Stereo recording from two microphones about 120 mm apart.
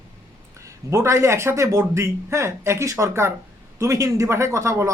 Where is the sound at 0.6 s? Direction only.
25° right (ahead or behind).